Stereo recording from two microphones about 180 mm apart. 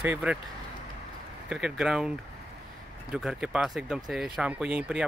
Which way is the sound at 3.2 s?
5° right (ahead or behind).